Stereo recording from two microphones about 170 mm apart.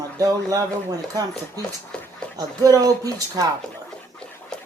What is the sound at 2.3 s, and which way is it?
Speech, 20° right (ahead or behind).